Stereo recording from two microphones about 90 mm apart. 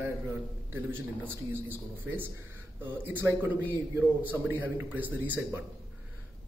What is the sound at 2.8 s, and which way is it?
A man's voice, 20° right (ahead or behind).